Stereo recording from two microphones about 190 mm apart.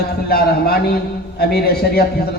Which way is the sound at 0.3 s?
55° left (ahead or behind).